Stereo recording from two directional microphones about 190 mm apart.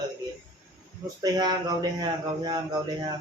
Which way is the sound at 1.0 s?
20° right (ahead or behind).